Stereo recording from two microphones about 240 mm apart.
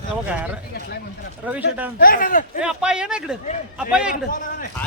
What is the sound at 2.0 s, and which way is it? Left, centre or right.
Speech, left.